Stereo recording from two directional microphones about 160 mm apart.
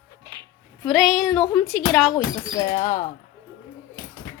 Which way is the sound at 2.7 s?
50° left (ahead or behind).